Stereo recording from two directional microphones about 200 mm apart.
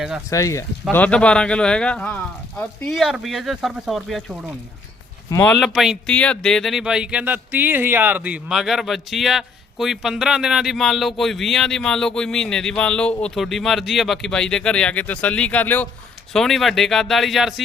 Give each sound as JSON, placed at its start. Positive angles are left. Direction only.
{"t": 0.3, "sound": "speech", "side_deg": 15}
{"t": 5.3, "sound": "speech", "side_deg": 10}
{"t": 5.5, "sound": "speech", "side_deg": 0}